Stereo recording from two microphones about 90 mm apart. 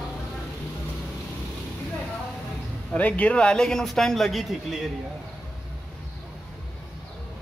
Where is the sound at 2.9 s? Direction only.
15° left (ahead or behind); by 4.9 s 5° right (ahead or behind).